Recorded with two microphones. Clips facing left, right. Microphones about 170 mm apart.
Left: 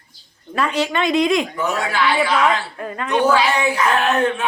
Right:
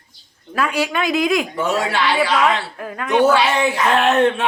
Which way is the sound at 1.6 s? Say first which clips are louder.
Right 2 dB; 25° right (ahead or behind).